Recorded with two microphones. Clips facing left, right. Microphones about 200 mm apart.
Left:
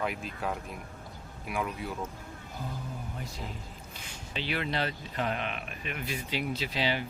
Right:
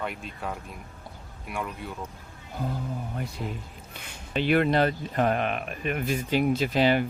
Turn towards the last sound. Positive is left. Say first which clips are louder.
# right 9 dB
turn(degrees=-50)  # may be behind; listen again after turning